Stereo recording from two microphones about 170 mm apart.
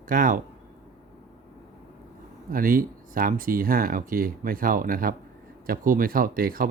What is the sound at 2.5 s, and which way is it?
Speech, 55° right (ahead or behind).